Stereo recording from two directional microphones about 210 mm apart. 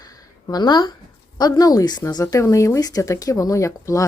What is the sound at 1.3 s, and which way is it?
A woman's voice, 20° left (ahead or behind).